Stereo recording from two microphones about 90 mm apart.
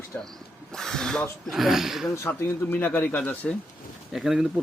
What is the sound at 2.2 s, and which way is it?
Speech, 20° left (ahead or behind).